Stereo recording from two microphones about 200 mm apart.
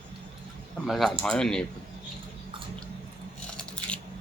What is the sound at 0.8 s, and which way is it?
Speech, centre (ahead or behind).